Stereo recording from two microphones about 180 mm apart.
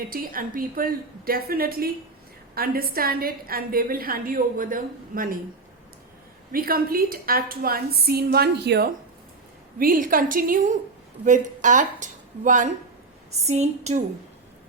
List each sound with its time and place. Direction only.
0.1 s a woman's voice: 50° right (ahead or behind)
6.5 s a woman's voice: 55° right (ahead or behind)
9.7 s a woman's voice: 50° right (ahead or behind)